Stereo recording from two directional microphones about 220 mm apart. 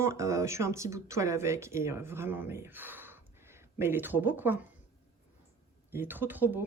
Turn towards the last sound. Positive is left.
turn(degrees=-10)  # may be behind; listen again after turning